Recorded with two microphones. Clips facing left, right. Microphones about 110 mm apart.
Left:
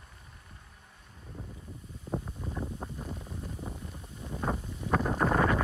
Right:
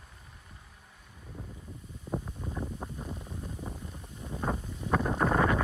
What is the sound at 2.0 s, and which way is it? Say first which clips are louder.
Wind noise: even; centre (ahead or behind).